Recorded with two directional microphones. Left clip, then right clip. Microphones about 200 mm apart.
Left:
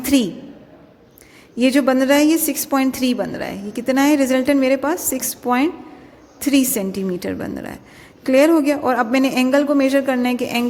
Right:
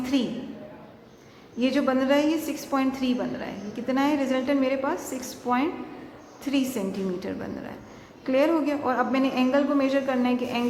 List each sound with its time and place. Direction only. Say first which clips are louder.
0.0 s a woman's voice: left 9 dB; 45° left (ahead or behind)
1.5 s a woman's voice: left 8 dB; 45° left (ahead or behind)